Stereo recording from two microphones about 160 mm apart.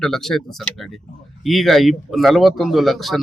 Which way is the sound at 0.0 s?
Centre (ahead or behind).